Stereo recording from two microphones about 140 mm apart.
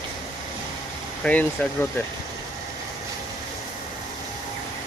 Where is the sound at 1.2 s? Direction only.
10° left (ahead or behind).